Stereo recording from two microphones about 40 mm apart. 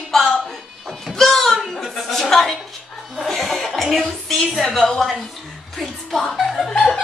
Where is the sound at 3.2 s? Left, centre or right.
Centre.